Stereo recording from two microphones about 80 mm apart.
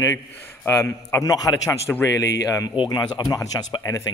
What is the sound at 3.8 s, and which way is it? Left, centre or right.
Speech, left.